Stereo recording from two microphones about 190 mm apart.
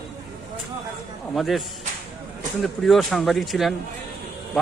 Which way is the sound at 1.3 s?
Centre (ahead or behind).